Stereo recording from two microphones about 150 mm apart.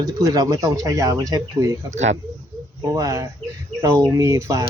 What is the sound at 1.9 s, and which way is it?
Speech, 50° right (ahead or behind).